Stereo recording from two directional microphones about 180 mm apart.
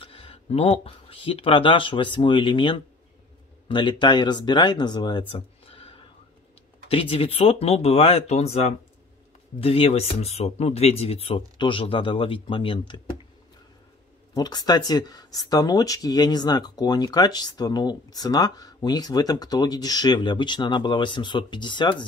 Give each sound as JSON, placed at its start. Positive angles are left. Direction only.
{"t": 0.0, "sound": "speech", "side_deg": 30}
{"t": 6.9, "sound": "speech", "side_deg": 30}
{"t": 14.3, "sound": "speech", "side_deg": 20}